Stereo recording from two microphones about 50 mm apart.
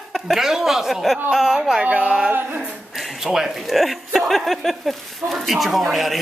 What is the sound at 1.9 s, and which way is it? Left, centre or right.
Speech, right.